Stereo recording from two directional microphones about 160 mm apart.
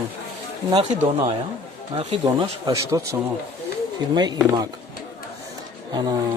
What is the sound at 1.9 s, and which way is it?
Speech, 30° right (ahead or behind).